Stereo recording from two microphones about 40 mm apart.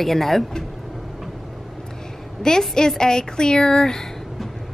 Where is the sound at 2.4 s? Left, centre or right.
Centre.